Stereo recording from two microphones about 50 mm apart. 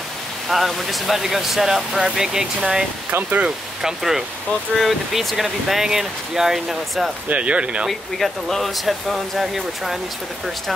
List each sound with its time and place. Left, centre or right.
0.5 s speech: centre
3.1 s speech: right
3.8 s speech: centre
7.2 s speech: right
8.2 s speech: centre